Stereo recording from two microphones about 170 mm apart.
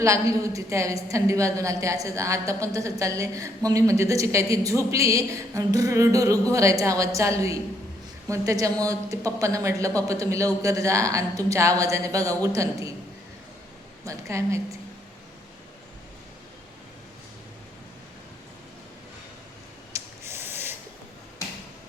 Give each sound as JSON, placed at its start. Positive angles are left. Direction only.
{"t": 0.0, "sound": "a woman's voice", "side_deg": -20}
{"t": 14.0, "sound": "a woman's voice", "side_deg": -20}
{"t": 19.9, "sound": "snort", "side_deg": -15}